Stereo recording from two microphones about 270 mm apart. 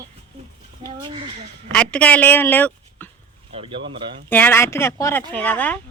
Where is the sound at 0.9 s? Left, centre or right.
Centre.